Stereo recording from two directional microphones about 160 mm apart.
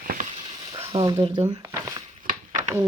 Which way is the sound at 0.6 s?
25° right (ahead or behind).